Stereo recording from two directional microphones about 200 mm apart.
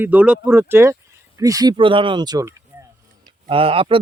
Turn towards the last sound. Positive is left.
turn(degrees=-25)  # may be behind; listen again after turning